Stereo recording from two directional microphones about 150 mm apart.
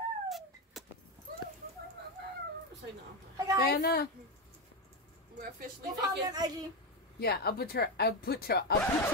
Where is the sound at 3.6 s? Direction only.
90° left.